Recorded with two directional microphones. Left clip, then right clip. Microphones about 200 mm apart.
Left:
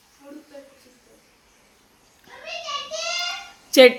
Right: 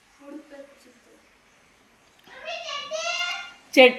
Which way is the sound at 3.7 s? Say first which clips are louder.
Left 3 dB; 20° left (ahead or behind).